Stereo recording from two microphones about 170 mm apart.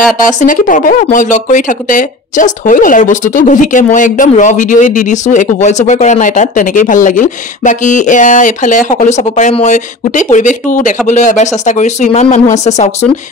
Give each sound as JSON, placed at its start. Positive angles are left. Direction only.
{"t": 0.2, "sound": "speech", "side_deg": 50}